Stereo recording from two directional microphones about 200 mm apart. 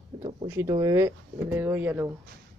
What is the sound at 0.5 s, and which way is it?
Speech, 20° right (ahead or behind).